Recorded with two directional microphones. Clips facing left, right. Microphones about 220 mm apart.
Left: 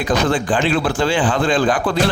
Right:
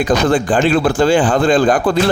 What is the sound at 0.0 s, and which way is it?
A man's voice, 45° right (ahead or behind).